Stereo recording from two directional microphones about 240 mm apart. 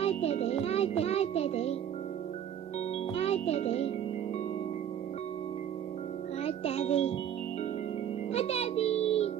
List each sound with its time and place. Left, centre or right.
0.0 s music: left
3.2 s music: left
6.4 s music: left
8.3 s music: left